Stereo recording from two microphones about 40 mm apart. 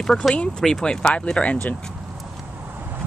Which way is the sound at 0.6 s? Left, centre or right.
Centre.